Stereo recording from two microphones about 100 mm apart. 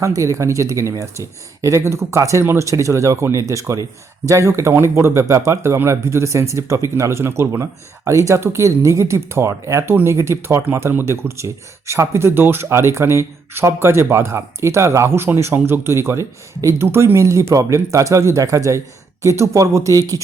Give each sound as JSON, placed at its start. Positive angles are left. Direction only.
{"t": 0.0, "sound": "speech", "side_deg": -30}